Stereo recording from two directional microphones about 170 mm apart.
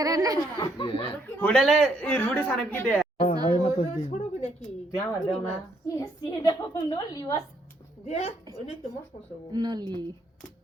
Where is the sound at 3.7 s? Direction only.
40° left (ahead or behind).